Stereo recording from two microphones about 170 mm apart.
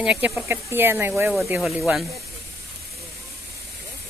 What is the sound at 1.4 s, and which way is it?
Speech, centre (ahead or behind).